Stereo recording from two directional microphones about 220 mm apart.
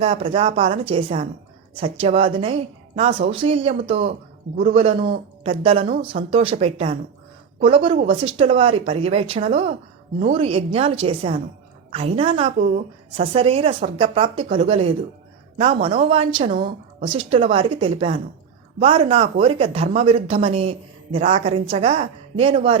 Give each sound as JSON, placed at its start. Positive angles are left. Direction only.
{"t": 0.0, "sound": "speech", "side_deg": -25}